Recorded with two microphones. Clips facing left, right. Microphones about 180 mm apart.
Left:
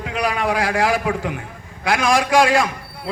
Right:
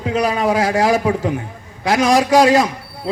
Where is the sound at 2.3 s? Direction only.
40° right (ahead or behind).